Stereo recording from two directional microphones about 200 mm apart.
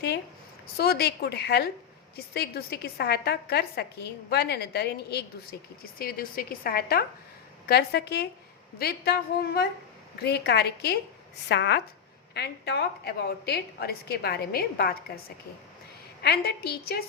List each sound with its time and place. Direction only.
0.8 s a woman's voice: 55° left (ahead or behind)
16.2 s a woman's voice: 55° left (ahead or behind)